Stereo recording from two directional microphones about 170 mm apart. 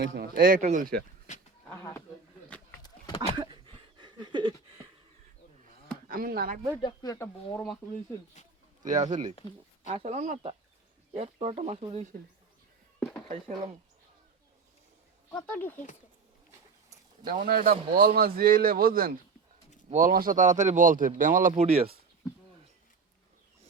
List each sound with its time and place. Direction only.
0.0 s a man's voice: 60° right (ahead or behind)
3.3 s a sound: 30° right (ahead or behind)
6.1 s a man's voice: 55° right (ahead or behind)
6.8 s speech: 20° left (ahead or behind)
7.5 s speech: 5° left (ahead or behind)
8.9 s speech: 45° right (ahead or behind)
15.3 s speech: 10° left (ahead or behind)
17.2 s a man's voice: 55° right (ahead or behind); by 21.8 s 40° right (ahead or behind)